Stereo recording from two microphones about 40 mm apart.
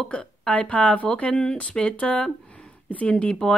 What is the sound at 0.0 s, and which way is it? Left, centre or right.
Speech, centre.